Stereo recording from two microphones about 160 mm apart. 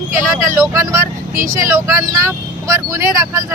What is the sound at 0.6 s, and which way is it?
Speech, 15° right (ahead or behind).